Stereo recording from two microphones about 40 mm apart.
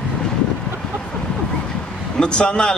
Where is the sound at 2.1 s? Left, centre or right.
Left.